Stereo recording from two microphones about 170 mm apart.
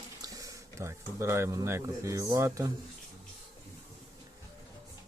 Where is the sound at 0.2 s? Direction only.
20° right (ahead or behind).